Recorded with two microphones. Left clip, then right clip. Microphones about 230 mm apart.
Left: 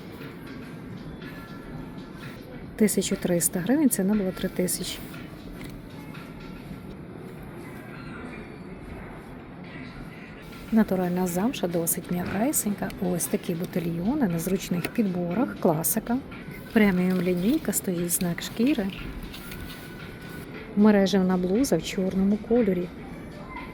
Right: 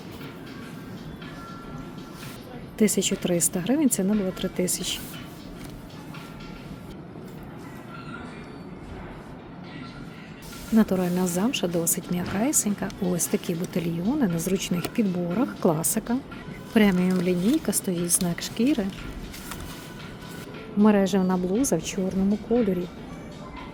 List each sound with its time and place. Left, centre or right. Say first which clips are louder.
2.7 s a woman's voice: right 1 dB; centre
10.8 s a woman's voice: right 1 dB; centre
20.8 s speech: even; centre